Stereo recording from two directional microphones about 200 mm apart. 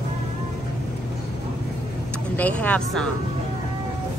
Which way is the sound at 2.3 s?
10° left (ahead or behind).